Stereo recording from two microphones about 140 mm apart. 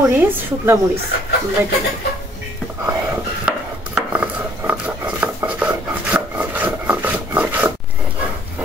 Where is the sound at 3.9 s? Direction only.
10° right (ahead or behind).